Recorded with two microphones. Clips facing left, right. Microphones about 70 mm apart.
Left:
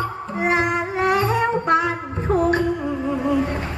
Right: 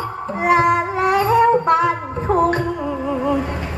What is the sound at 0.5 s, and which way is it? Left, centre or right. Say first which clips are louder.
Music: right 7 dB; right.